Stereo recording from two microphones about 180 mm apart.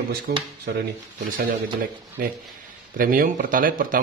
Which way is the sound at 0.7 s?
70° right (ahead or behind).